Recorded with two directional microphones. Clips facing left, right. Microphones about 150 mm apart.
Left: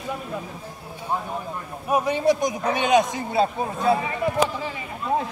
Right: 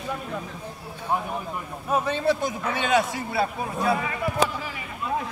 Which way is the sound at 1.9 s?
15° left (ahead or behind).